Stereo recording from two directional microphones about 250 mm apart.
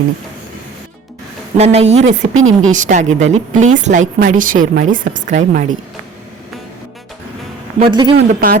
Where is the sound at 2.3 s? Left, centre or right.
Right.